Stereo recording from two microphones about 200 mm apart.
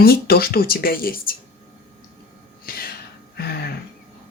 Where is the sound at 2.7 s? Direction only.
50° left (ahead or behind).